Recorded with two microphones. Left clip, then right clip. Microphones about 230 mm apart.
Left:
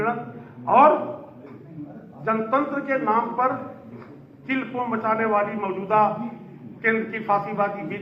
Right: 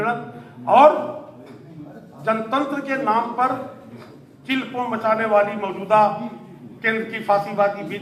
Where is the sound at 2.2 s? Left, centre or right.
Right.